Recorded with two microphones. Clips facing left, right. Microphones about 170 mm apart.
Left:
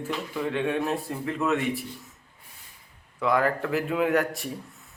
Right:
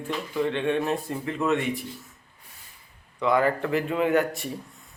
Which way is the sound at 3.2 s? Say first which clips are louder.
Right 1 dB; centre (ahead or behind).